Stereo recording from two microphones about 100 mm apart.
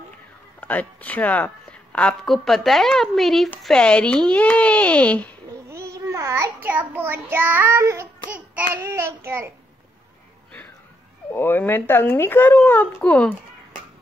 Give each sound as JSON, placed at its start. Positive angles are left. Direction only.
{"t": 0.6, "sound": "a woman's voice", "side_deg": 15}
{"t": 5.7, "sound": "babbling", "side_deg": -30}
{"t": 6.6, "sound": "child singing", "side_deg": -15}
{"t": 11.3, "sound": "speech", "side_deg": 20}